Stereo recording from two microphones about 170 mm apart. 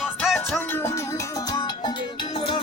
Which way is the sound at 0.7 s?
15° left (ahead or behind).